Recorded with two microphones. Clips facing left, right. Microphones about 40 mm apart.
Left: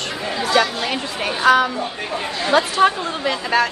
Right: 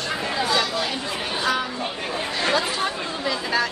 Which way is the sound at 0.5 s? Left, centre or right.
Left.